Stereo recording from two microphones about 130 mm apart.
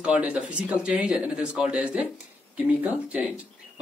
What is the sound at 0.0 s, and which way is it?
Speech, 10° right (ahead or behind).